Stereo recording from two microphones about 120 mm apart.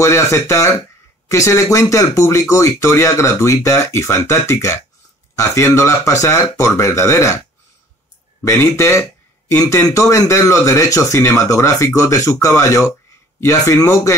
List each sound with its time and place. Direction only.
0.0 s speech: 25° left (ahead or behind)
8.5 s speech: 25° left (ahead or behind)